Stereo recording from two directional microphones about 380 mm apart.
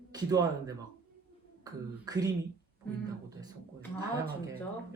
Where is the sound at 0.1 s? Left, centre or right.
Centre.